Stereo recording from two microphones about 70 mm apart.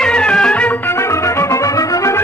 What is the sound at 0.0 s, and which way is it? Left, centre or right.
Music, centre.